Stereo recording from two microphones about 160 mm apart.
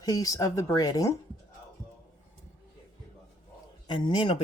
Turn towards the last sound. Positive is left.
turn(degrees=30)  # may be behind; listen again after turning